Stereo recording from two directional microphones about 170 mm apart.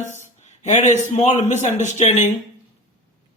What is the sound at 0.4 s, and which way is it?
A man's voice, 45° left (ahead or behind).